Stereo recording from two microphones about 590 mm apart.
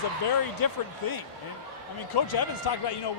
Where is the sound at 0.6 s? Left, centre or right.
Left.